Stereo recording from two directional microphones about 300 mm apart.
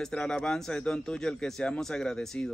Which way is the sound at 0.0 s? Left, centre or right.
Centre.